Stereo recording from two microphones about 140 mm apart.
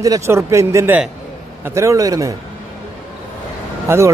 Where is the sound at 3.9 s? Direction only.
20° right (ahead or behind).